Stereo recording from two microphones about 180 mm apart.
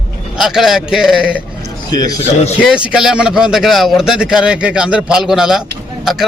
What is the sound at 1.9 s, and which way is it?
Speech, 20° left (ahead or behind).